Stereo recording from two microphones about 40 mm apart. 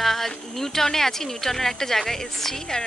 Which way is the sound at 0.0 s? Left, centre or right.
Centre.